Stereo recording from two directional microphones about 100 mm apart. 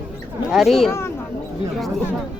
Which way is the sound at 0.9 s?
25° left (ahead or behind).